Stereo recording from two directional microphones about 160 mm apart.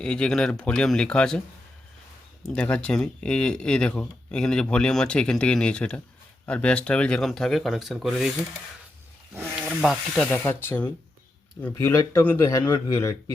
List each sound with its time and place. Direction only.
0.0 s speech: 5° left (ahead or behind)
2.6 s speech: 5° left (ahead or behind)
9.6 s speech: centre (ahead or behind)
10.3 s speech: 10° left (ahead or behind)